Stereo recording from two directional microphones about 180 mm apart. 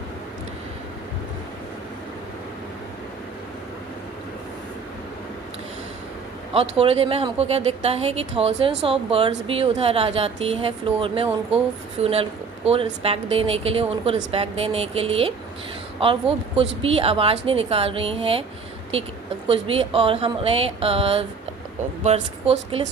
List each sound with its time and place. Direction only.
6.5 s speech: 35° right (ahead or behind)
19.5 s speech: 30° right (ahead or behind)